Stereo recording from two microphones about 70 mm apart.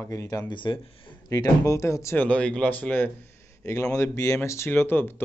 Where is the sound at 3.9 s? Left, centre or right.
Left.